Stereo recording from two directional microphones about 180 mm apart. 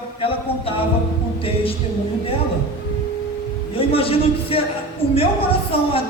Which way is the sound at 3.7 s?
30° left (ahead or behind).